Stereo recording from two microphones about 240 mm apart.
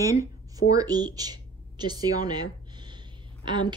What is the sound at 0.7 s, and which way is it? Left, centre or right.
Speech, centre.